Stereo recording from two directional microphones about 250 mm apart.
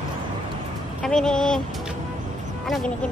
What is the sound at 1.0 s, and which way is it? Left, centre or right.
Speech, centre.